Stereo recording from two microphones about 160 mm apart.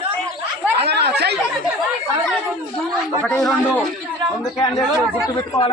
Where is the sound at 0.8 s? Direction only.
90° right.